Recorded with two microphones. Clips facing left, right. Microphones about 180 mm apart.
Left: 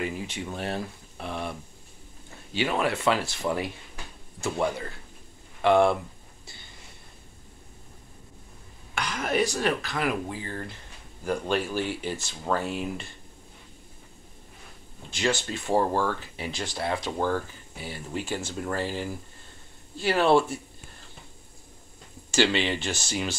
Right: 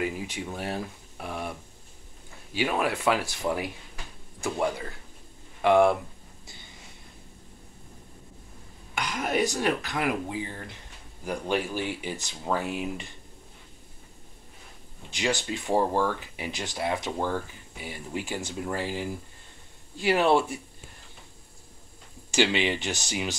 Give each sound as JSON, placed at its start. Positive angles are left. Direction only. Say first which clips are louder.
{"t": 0.0, "sound": "speech", "louder": "right 1 dB", "side_deg": -10}
{"t": 2.5, "sound": "speech", "louder": "left 1 dB", "side_deg": -10}
{"t": 5.6, "sound": "speech", "louder": "even", "side_deg": -15}
{"t": 8.9, "sound": "speech", "louder": "left 1 dB", "side_deg": -15}
{"t": 15.0, "sound": "speech", "louder": "left 1 dB", "side_deg": -15}
{"t": 22.3, "sound": "speech", "louder": "even", "side_deg": -15}